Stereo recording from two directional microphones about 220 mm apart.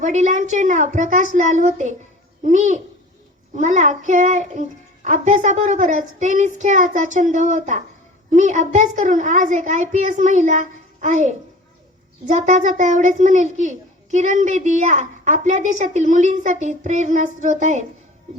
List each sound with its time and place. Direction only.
0.0 s a woman's voice: 35° right (ahead or behind)